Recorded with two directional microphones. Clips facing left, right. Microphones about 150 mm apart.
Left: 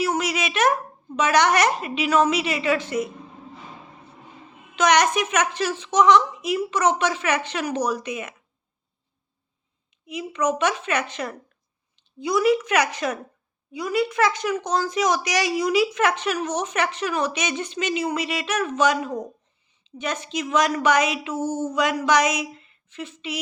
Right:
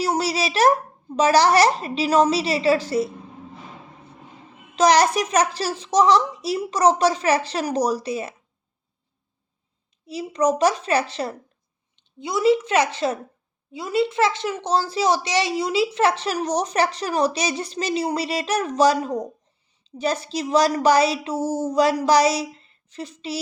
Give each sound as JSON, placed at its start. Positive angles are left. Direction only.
{"t": 0.0, "sound": "a sound", "side_deg": -35}
{"t": 1.1, "sound": "speech", "side_deg": -35}
{"t": 4.7, "sound": "speech", "side_deg": -35}
{"t": 10.1, "sound": "a woman's voice", "side_deg": -35}